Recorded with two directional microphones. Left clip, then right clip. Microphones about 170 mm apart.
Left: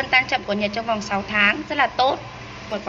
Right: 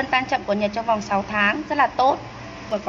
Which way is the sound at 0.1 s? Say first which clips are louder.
Left 3 dB; 10° right (ahead or behind).